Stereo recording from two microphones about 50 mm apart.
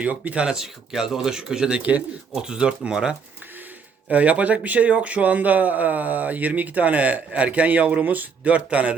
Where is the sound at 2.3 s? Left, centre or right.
Centre.